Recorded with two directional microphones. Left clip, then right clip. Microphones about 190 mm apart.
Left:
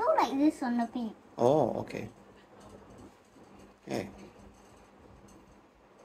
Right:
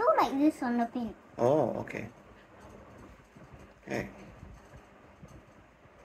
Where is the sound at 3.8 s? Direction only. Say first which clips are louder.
Even; 10° left (ahead or behind).